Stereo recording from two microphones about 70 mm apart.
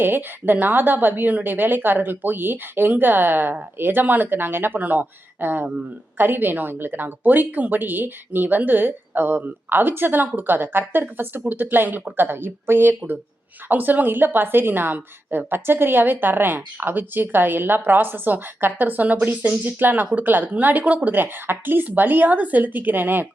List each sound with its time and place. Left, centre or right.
0.0 s a woman's voice: right